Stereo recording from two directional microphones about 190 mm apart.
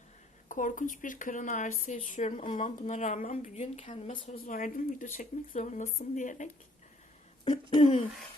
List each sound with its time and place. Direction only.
0.4 s speech: 45° left (ahead or behind)
7.7 s speech: 30° left (ahead or behind)